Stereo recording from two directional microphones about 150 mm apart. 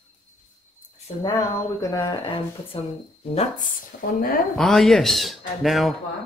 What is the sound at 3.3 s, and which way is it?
Speech, 45° left (ahead or behind).